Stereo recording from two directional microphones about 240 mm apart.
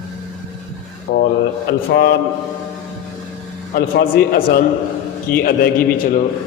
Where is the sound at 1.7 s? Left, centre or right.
Left.